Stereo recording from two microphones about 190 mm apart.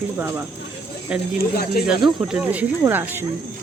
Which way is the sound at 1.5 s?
55° left (ahead or behind).